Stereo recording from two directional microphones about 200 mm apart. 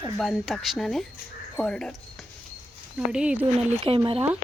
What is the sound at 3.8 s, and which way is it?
Speech, 25° right (ahead or behind).